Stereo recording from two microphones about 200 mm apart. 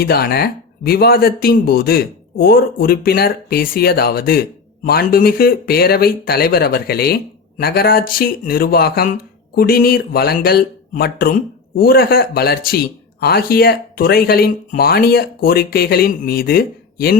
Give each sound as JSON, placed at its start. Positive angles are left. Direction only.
{"t": 0.0, "sound": "speech", "side_deg": 50}